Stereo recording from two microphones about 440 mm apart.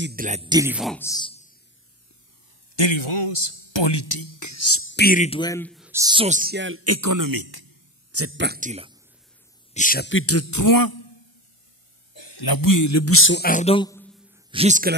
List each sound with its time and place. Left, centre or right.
0.0 s speech: centre
2.7 s speech: left; by 7.7 s right
8.1 s speech: right
9.8 s a man's voice: centre; by 11.1 s left
12.1 s a man's voice: left; by 14.1 s centre
14.3 s speech: centre